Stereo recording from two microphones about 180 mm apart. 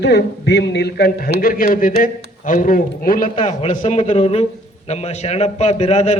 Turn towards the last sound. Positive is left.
turn(degrees=40)  # may be behind; listen again after turning